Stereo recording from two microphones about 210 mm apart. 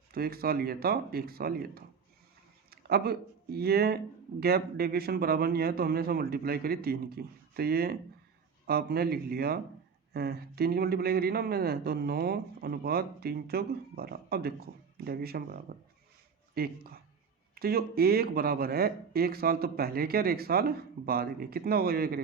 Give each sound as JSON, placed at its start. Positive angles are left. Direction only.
{"t": 0.1, "sound": "speech", "side_deg": -45}